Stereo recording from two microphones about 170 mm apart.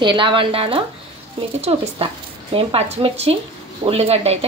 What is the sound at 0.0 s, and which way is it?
A woman's voice, 30° right (ahead or behind).